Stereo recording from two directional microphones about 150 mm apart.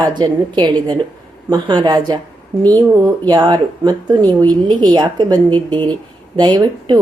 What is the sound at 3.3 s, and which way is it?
A woman's voice, 25° right (ahead or behind).